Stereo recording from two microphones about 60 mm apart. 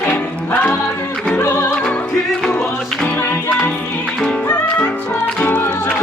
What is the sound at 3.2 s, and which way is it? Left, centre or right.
Music, left.